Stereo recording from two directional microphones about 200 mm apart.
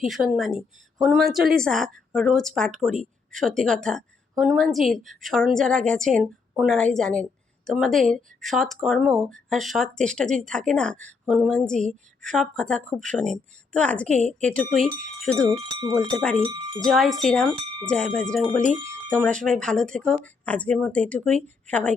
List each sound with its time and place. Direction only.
0.0 s a woman's voice: centre (ahead or behind)
15.4 s cowbell: 25° right (ahead or behind)
16.1 s a woman's voice: 5° left (ahead or behind)
16.5 s cowbell: 20° right (ahead or behind)
16.8 s a woman's voice: centre (ahead or behind)